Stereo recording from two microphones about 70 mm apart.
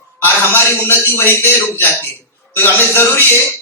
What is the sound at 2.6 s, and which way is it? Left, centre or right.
Speech, left.